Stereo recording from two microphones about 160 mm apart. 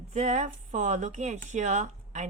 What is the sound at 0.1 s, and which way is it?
A woman's voice, 50° right (ahead or behind).